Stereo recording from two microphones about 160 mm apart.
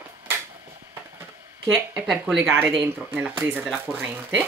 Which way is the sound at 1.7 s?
Centre (ahead or behind).